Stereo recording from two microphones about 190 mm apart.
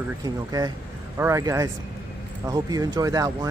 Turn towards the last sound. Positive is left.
turn(degrees=-20)  # may be behind; listen again after turning